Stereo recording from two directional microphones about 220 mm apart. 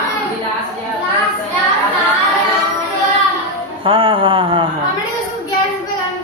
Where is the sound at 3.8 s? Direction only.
25° right (ahead or behind).